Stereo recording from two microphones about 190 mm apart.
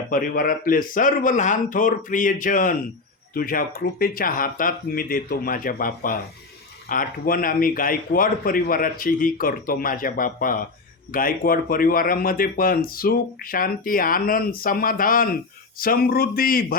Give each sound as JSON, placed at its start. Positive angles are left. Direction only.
{"t": 0.1, "sound": "speech", "side_deg": 45}